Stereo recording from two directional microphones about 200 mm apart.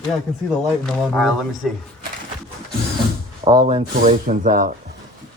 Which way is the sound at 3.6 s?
30° right (ahead or behind).